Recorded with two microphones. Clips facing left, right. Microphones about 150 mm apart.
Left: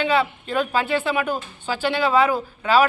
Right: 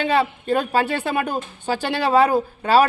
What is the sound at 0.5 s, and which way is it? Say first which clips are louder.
Speech: right 2 dB; 45° right (ahead or behind).